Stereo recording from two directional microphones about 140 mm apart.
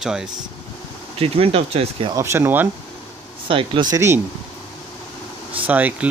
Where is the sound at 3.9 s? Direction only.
20° right (ahead or behind).